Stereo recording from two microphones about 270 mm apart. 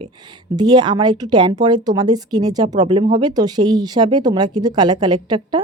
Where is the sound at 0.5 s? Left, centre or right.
Centre.